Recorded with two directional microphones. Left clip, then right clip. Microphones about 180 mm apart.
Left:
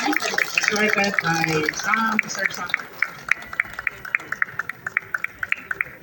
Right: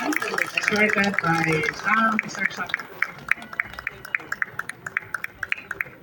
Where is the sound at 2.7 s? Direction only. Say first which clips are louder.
Left 2 dB; 70° right (ahead or behind).